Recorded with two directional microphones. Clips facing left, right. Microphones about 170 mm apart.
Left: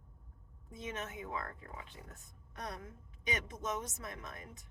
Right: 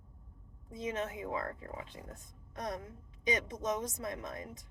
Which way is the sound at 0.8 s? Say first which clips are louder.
Right 6 dB; 30° right (ahead or behind).